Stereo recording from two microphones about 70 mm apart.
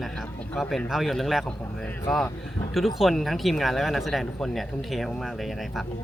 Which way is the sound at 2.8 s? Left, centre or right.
Centre.